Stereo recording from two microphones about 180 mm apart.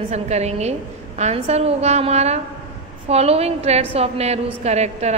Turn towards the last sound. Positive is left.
turn(degrees=-35)  # may be behind; listen again after turning